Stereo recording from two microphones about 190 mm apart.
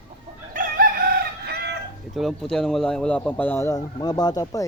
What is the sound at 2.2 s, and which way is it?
Speech, centre (ahead or behind).